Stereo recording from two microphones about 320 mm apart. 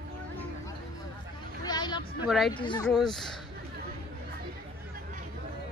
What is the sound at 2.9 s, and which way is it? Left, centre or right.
Speech, centre.